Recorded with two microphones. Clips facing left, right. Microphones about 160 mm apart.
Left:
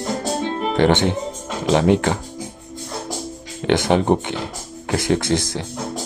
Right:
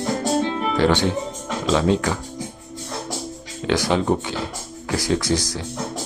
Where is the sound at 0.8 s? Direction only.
20° left (ahead or behind).